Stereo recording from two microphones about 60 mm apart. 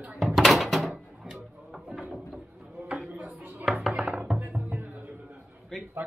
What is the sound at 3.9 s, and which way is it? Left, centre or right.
Music, centre.